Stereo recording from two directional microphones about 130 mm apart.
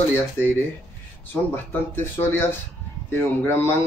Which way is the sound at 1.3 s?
15° left (ahead or behind).